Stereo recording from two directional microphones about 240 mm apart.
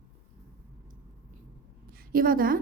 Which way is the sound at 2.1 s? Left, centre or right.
Right.